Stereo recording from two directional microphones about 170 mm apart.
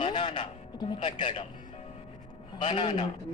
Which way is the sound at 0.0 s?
25° left (ahead or behind).